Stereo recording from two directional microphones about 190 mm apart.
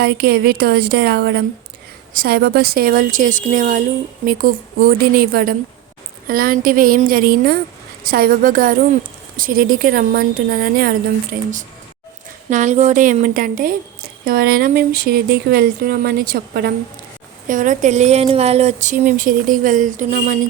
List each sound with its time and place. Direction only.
0.0 s a woman's voice: 55° right (ahead or behind)